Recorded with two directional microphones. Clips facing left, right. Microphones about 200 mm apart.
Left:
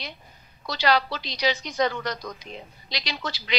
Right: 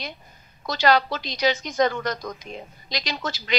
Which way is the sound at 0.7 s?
45° right (ahead or behind).